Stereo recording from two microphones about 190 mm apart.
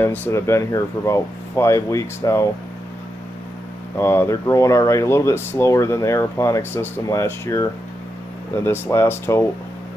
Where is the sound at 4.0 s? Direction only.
15° left (ahead or behind).